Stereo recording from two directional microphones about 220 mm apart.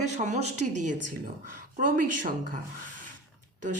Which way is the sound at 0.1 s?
35° right (ahead or behind).